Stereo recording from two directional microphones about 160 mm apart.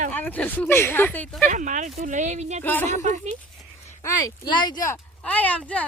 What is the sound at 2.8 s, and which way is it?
Speech, 45° right (ahead or behind).